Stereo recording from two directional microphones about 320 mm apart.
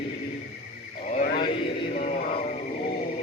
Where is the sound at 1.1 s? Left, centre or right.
Centre.